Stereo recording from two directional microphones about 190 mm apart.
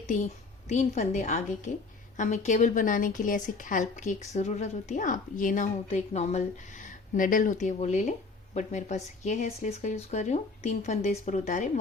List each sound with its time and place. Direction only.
0.7 s a woman's voice: 40° left (ahead or behind)